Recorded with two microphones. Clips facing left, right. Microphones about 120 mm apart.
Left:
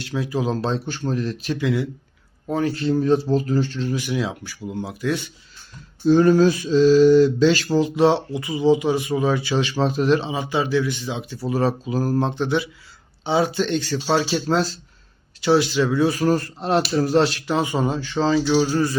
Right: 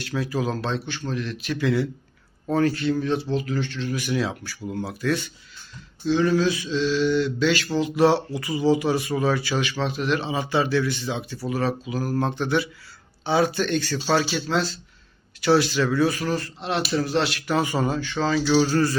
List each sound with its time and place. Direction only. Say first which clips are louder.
0.1 s mantra: left 2 dB; 20° left (ahead or behind); by 1.5 s 35° left (ahead or behind)
1.5 s speech: right 2 dB; 15° left (ahead or behind)
2.7 s mantra: left 5 dB; 30° left (ahead or behind)
3.9 s speech: right 2 dB; 15° left (ahead or behind)
6.1 s mantra: left 6 dB; 45° left (ahead or behind)
7.9 s speech: right 2 dB; 20° left (ahead or behind); by 10.2 s 35° left (ahead or behind)
10.2 s speech: even; 20° left (ahead or behind)
11.5 s mantra: left 4 dB; 35° left (ahead or behind)
12.2 s speech: left 2 dB; 20° left (ahead or behind)
14.3 s mantra: left 4 dB; 35° left (ahead or behind)
15.4 s speech: left 2 dB; 20° left (ahead or behind)
16.2 s mantra: left 6 dB; 40° left (ahead or behind)
17.5 s speech: left 1 dB; 20° left (ahead or behind)
18.4 s speech: left 1 dB; 10° left (ahead or behind)